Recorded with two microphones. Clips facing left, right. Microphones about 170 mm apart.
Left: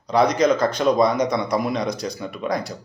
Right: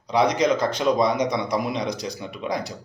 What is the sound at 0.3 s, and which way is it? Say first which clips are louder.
Speech: left 3 dB; 45° left (ahead or behind).